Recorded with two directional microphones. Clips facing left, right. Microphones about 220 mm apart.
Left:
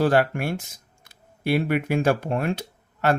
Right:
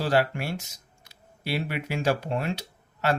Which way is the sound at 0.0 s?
55° left (ahead or behind).